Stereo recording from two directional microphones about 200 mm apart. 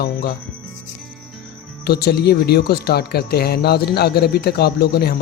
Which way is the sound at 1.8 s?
50° left (ahead or behind).